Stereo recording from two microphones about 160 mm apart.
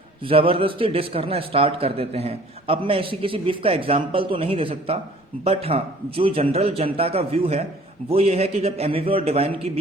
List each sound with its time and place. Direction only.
0.2 s a man's voice: 35° right (ahead or behind)